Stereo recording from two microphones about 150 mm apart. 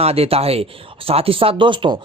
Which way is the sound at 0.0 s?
40° right (ahead or behind).